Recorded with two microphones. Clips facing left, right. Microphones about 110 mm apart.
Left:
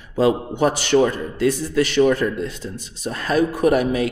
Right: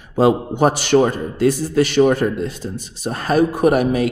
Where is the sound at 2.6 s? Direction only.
65° right (ahead or behind).